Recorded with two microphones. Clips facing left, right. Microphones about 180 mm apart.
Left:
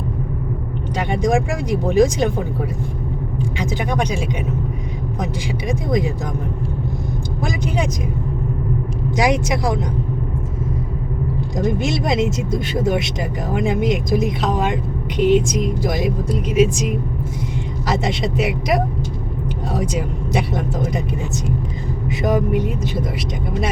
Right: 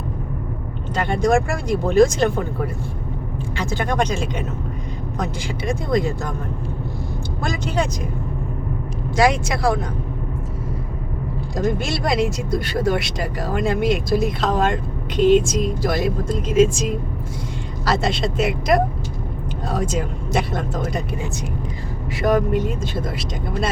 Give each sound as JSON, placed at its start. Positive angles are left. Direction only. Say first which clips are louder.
{"t": 1.0, "sound": "speech", "louder": "right 1 dB", "side_deg": 15}
{"t": 3.6, "sound": "speech", "louder": "right 1 dB", "side_deg": 15}
{"t": 7.4, "sound": "speech", "louder": "even", "side_deg": 15}
{"t": 9.1, "sound": "speech", "louder": "even", "side_deg": 20}
{"t": 11.5, "sound": "speech", "louder": "left 1 dB", "side_deg": 20}
{"t": 19.7, "sound": "speech", "louder": "even", "side_deg": 15}
{"t": 22.1, "sound": "speech", "louder": "even", "side_deg": 15}